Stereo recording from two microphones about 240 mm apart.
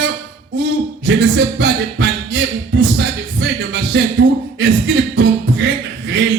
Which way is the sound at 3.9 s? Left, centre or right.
Right.